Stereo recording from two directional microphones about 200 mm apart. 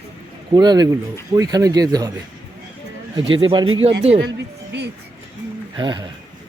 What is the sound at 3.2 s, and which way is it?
Speech, 25° right (ahead or behind).